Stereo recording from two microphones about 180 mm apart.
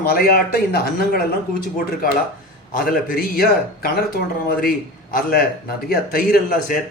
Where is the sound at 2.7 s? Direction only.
55° left (ahead or behind).